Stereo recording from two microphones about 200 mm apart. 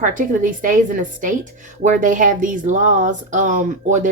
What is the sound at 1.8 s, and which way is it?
A woman's voice, 40° right (ahead or behind).